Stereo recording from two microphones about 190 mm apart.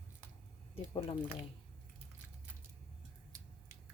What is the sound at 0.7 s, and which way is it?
Speech, 30° left (ahead or behind).